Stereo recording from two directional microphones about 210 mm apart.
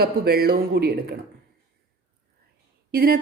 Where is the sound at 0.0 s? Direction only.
50° right (ahead or behind).